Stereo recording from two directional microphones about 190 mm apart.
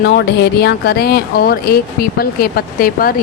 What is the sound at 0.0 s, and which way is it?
Speech, 60° left (ahead or behind).